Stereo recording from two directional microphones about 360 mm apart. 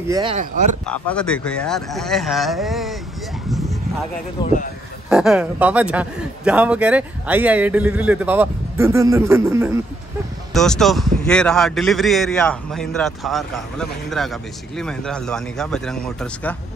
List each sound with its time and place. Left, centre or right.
0.1 s speech: centre
0.8 s a man's voice: centre
3.4 s vehicle: centre
4.4 s speech: centre
5.1 s a man's voice: centre